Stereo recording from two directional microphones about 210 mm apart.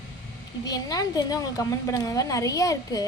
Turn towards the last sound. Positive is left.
turn(degrees=15)  # may be behind; listen again after turning